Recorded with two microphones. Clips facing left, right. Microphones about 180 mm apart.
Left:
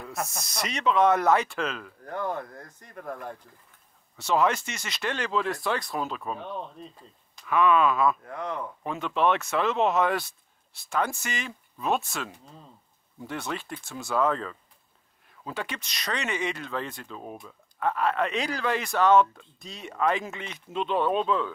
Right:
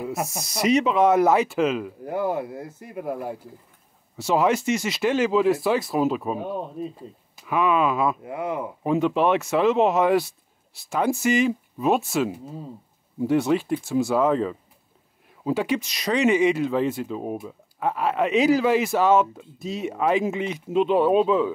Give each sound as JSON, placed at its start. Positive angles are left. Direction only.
{"t": 0.3, "sound": "speech", "side_deg": -5}